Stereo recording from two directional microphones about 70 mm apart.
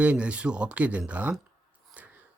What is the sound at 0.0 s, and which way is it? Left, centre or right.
Speech, centre.